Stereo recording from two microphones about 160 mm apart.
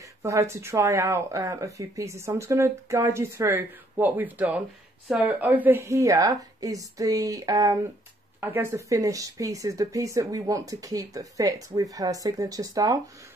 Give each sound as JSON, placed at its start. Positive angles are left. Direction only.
{"t": 0.2, "sound": "speech", "side_deg": -20}